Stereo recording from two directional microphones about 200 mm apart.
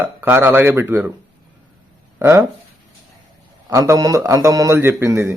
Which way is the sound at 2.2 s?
10° right (ahead or behind).